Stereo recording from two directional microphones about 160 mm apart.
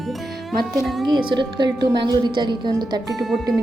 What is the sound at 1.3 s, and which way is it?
A woman's voice, 30° right (ahead or behind).